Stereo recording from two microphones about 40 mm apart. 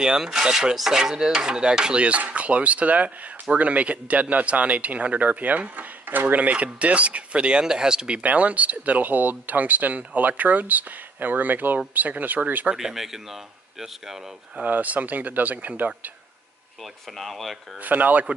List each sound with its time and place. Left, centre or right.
0.0 s speech: centre
7.6 s speech: centre
8.2 s speech: right
12.7 s speech: centre
14.7 s speech: right
16.8 s speech: centre
17.7 s speech: right